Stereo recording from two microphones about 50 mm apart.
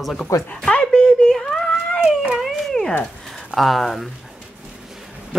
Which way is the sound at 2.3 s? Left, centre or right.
Centre.